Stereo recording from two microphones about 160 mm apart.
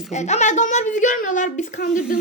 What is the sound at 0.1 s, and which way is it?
A woman's voice, 45° left (ahead or behind).